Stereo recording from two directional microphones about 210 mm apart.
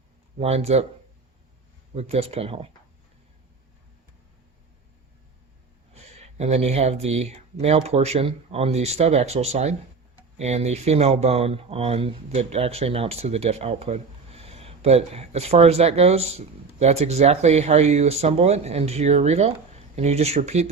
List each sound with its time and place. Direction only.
0.3 s speech: 30° right (ahead or behind)
2.0 s speech: 30° right (ahead or behind)
5.9 s speech: 30° right (ahead or behind)